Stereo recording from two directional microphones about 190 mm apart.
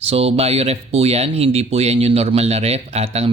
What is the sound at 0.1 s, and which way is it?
Speech, 30° right (ahead or behind).